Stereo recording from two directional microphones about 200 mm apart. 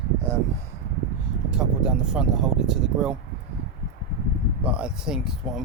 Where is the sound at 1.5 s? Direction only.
5° right (ahead or behind).